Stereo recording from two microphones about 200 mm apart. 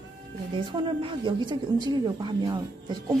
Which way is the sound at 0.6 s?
25° right (ahead or behind).